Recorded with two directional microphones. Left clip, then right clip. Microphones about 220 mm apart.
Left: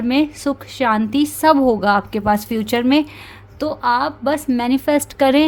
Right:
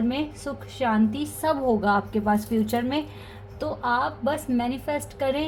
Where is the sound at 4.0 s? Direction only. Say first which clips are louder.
Left 6 dB; 50° left (ahead or behind).